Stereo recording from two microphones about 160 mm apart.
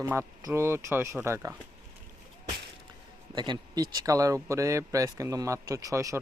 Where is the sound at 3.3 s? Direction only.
25° right (ahead or behind).